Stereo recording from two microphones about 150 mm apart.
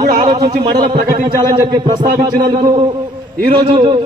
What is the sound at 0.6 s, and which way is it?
A man's voice, 40° right (ahead or behind).